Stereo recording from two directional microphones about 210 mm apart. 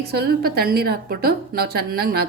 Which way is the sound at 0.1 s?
50° right (ahead or behind).